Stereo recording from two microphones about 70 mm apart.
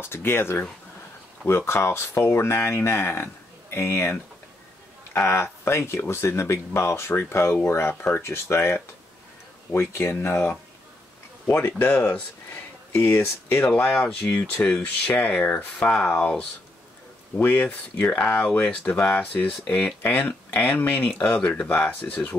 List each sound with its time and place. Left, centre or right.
0.0 s speech: left
1.7 s speech: left
14.2 s speech: centre
17.4 s speech: left